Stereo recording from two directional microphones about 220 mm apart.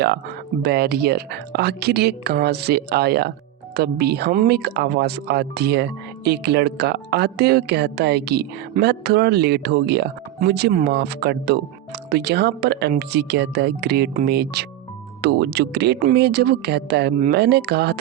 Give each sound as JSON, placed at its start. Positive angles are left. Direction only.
{"t": 0.6, "sound": "speech", "side_deg": -45}